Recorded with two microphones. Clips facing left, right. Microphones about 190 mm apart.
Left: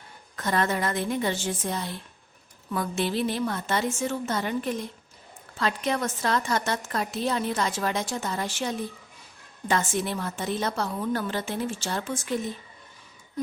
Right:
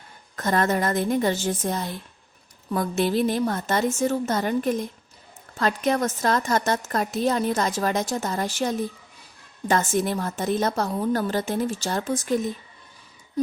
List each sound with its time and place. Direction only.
0.3 s a woman's voice: 45° right (ahead or behind)